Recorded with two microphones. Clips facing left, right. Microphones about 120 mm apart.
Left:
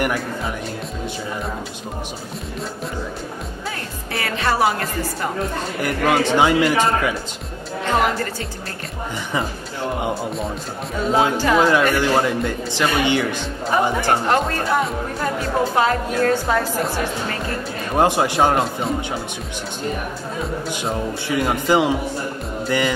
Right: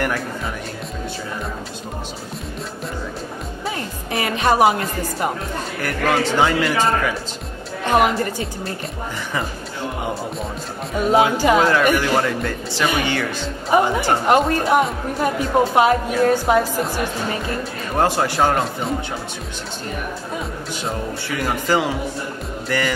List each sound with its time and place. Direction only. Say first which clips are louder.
4.1 s music: right 3 dB; 20° right (ahead or behind)
5.8 s speech: left 1 dB; 20° left (ahead or behind)
7.9 s speech: right 3 dB; 15° right (ahead or behind)
11.0 s speech: right 2 dB; 15° right (ahead or behind)
12.0 s speech: left 1 dB; 20° left (ahead or behind)
13.7 s speech: right 2 dB; 15° right (ahead or behind)
17.9 s speech: left 2 dB; 20° left (ahead or behind)
21.4 s speech: left 2 dB; 20° left (ahead or behind)